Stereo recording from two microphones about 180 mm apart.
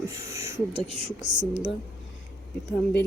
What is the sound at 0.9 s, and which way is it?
Speech, 30° right (ahead or behind).